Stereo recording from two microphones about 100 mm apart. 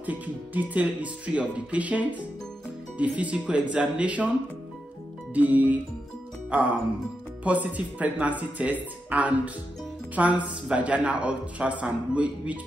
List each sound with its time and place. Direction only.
0.0 s speech: 15° right (ahead or behind)
5.3 s speech: 15° right (ahead or behind)
7.4 s speech: 15° right (ahead or behind)